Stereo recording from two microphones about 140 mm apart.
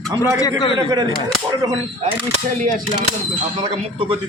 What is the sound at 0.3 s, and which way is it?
Speech, 25° left (ahead or behind).